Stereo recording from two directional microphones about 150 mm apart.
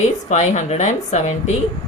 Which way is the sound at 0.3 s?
50° left (ahead or behind).